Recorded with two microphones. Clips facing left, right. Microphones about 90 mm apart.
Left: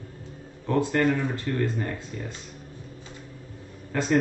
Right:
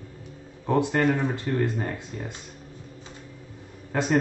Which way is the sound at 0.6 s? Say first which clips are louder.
Right 1 dB; 20° right (ahead or behind).